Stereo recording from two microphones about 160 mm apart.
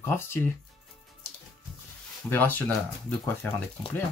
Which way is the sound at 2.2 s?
10° left (ahead or behind).